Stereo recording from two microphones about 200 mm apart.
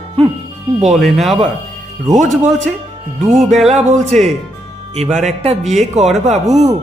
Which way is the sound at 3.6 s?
35° right (ahead or behind).